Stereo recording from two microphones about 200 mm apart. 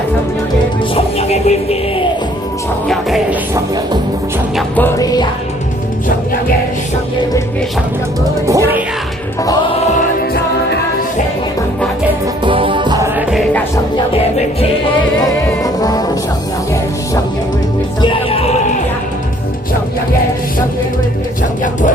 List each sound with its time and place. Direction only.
0.9 s music: 30° left (ahead or behind)
2.8 s music: centre (ahead or behind)
4.5 s music: 10° left (ahead or behind)
8.4 s speech: 15° right (ahead or behind)
10.0 s music: 50° left (ahead or behind)
12.5 s music: 25° right (ahead or behind)
14.1 s music: 30° left (ahead or behind)
15.6 s music: 20° left (ahead or behind)
18.0 s music: 25° left (ahead or behind)
21.6 s music: 40° left (ahead or behind)